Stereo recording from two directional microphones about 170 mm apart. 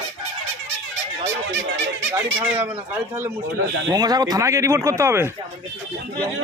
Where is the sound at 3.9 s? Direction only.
25° right (ahead or behind).